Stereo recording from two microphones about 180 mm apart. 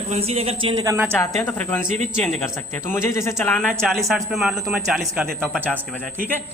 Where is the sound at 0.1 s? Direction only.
35° right (ahead or behind).